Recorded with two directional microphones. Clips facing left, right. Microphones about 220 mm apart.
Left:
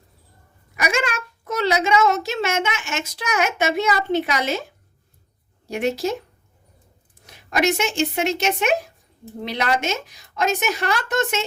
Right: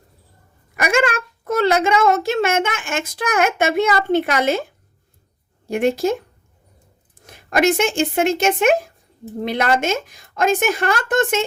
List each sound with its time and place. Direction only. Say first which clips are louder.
0.8 s a woman's voice: right 5 dB; 55° right (ahead or behind)
5.6 s a woman's voice: right 5 dB; 50° right (ahead or behind)
7.3 s a woman's voice: right 4 dB; 50° right (ahead or behind)